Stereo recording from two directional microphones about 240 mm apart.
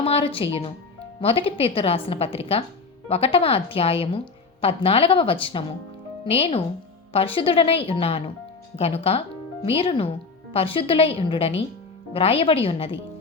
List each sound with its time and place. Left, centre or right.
0.0 s a woman's voice: left